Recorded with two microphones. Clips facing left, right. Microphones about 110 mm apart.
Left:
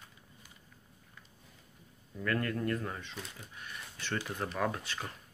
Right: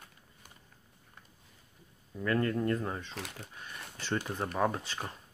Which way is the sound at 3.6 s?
30° right (ahead or behind).